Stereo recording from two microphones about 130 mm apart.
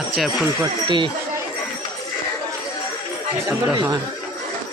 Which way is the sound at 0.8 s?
40° right (ahead or behind).